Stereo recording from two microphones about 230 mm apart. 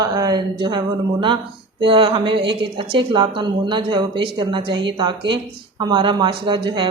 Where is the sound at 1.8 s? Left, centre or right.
Right.